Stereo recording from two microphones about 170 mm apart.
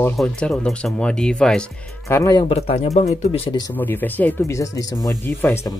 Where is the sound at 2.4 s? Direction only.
35° left (ahead or behind).